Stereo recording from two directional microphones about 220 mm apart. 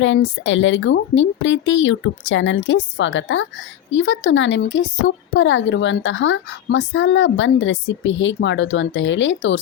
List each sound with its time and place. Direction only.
0.0 s speech: 60° left (ahead or behind)